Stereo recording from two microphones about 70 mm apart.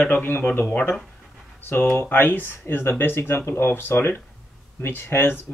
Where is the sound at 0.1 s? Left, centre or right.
Left.